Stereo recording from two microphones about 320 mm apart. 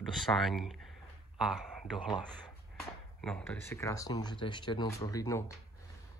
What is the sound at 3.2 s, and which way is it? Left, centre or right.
Speech, centre.